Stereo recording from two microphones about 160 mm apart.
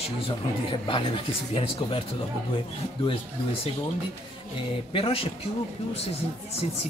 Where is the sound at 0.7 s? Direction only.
35° left (ahead or behind).